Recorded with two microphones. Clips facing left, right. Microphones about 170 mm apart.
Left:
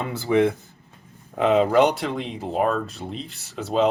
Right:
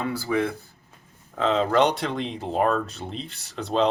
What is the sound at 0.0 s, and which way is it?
Speech, 20° left (ahead or behind).